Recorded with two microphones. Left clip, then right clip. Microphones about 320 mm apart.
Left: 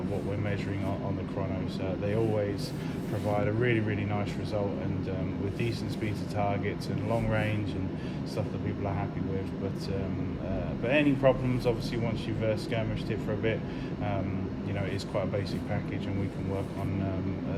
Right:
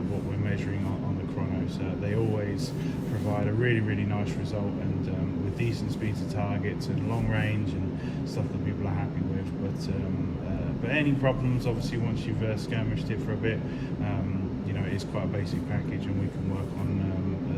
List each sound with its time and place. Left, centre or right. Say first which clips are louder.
3.2 s a man's voice: even; centre
10.8 s a man's voice: left 3 dB; centre